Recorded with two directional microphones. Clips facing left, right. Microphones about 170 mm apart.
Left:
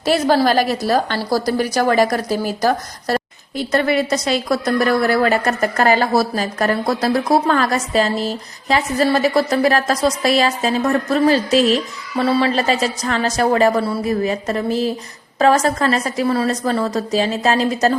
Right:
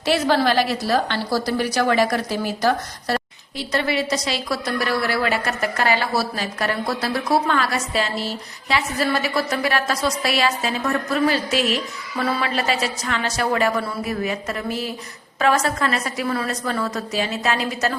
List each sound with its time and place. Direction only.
0.0 s a woman's voice: 40° left (ahead or behind)